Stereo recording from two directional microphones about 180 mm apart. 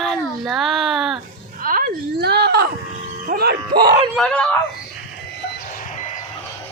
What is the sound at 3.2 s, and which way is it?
Speech, 55° right (ahead or behind).